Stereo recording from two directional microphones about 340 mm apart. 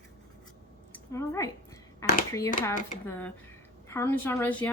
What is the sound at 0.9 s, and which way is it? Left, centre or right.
Speech, centre.